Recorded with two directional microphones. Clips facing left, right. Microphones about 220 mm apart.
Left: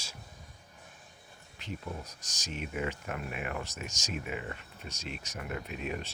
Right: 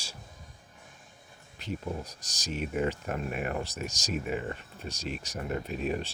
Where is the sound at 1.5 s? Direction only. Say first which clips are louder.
Right 5 dB; 35° right (ahead or behind).